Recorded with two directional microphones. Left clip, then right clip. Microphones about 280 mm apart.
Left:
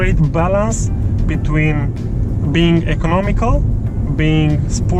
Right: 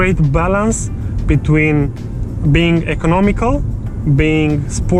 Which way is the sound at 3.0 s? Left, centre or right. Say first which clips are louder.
Right 6 dB; right.